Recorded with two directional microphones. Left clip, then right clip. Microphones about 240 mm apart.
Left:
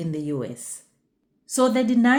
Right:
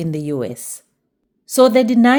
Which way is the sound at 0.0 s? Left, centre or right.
Right.